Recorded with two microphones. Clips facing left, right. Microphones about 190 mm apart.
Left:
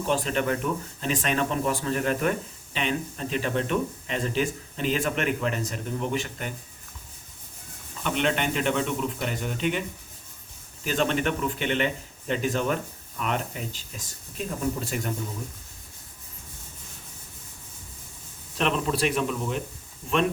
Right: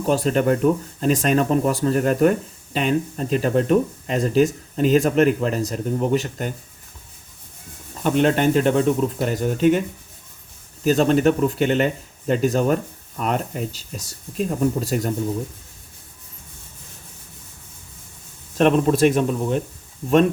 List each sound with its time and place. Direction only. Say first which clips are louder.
0.1 s speech: right 8 dB; 40° right (ahead or behind)
8.0 s speech: right 9 dB; 40° right (ahead or behind)
10.8 s speech: right 9 dB; 40° right (ahead or behind)
18.5 s speech: right 9 dB; 45° right (ahead or behind)